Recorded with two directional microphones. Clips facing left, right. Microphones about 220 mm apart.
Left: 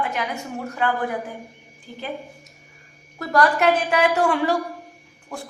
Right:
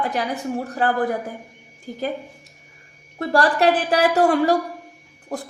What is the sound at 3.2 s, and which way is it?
A woman's voice, 30° right (ahead or behind).